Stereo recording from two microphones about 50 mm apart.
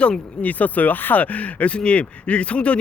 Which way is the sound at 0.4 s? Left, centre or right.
Left.